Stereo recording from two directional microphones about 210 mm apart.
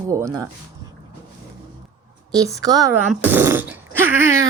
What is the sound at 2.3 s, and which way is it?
Speech, 15° right (ahead or behind).